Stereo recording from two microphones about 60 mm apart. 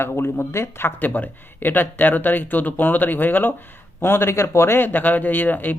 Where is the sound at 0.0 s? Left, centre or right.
Left.